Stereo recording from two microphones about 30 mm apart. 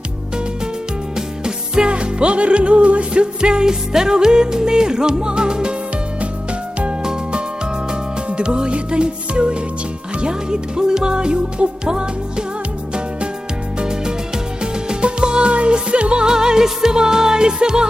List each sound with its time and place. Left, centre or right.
1.1 s music: right
8.3 s music: right
14.6 s music: right
16.2 s music: right